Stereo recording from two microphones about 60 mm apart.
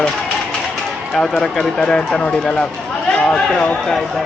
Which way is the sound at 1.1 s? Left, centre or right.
Centre.